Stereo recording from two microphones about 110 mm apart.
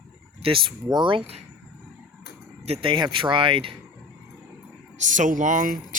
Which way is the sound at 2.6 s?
70° right (ahead or behind).